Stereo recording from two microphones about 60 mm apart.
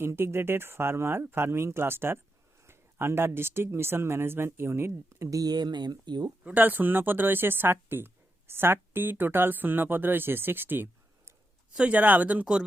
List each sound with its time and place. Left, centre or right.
0.0 s speech: right
6.4 s speech: right
11.7 s speech: right